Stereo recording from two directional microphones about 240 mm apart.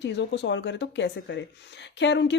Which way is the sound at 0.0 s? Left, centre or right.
Left.